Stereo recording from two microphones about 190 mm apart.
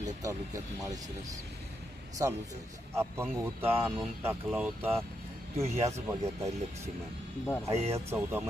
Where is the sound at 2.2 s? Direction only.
15° right (ahead or behind).